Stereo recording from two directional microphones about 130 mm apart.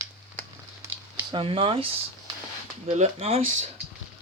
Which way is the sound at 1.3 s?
40° right (ahead or behind).